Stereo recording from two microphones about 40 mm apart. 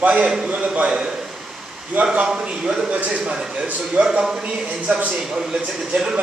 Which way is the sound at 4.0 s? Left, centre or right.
Centre.